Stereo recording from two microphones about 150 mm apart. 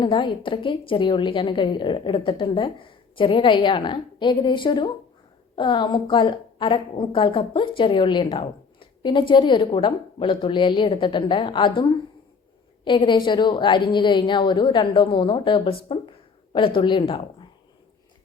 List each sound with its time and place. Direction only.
0.0 s a woman's voice: 30° left (ahead or behind)